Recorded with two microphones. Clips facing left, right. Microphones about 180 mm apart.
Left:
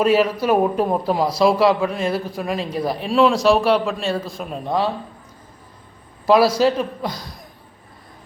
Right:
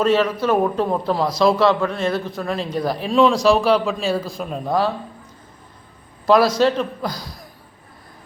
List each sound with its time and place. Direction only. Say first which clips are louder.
0.0 s a man's voice: left 1 dB; 10° left (ahead or behind)
6.2 s a man's voice: even; 5° left (ahead or behind)